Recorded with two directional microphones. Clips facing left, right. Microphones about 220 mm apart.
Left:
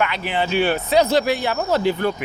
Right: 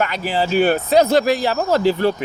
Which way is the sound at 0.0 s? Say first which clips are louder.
Right 2 dB; 40° right (ahead or behind).